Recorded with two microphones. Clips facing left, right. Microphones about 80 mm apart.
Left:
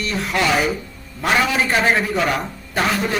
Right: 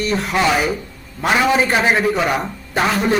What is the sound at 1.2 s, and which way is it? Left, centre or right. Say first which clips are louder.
A man's voice: right 3 dB; centre.